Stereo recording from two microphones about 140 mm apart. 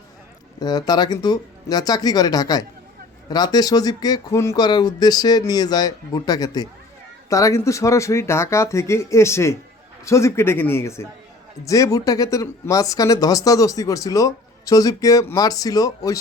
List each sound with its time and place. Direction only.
0.6 s speech: 30° left (ahead or behind)